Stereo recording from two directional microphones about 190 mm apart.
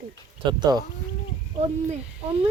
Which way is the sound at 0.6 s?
20° right (ahead or behind).